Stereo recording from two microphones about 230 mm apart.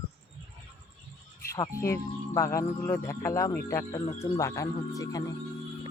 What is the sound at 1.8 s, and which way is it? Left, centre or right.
Speech, centre.